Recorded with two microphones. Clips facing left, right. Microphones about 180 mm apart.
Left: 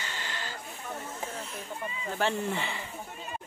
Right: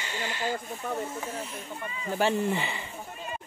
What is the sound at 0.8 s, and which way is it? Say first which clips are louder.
Speech: right 6 dB; 55° right (ahead or behind).